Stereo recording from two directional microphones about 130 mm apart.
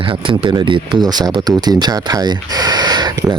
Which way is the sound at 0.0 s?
45° right (ahead or behind).